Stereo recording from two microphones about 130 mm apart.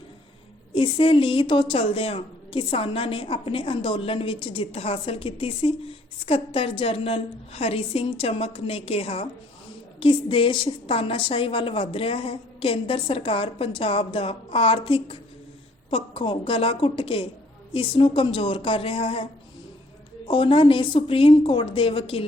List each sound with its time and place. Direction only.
0.7 s a woman's voice: 45° left (ahead or behind)